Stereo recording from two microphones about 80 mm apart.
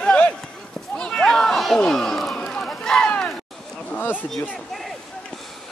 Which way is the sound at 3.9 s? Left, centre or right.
Left.